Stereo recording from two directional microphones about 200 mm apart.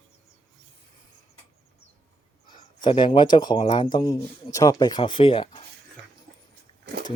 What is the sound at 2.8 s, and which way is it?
Speech, 25° left (ahead or behind).